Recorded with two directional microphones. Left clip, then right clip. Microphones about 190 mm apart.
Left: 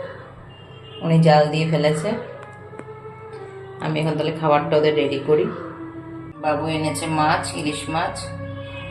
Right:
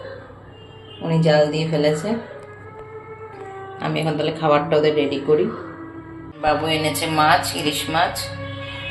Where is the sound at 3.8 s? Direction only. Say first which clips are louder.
Right 1 dB; 5° right (ahead or behind).